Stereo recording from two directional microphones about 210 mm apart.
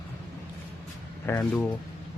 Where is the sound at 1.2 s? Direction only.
10° left (ahead or behind).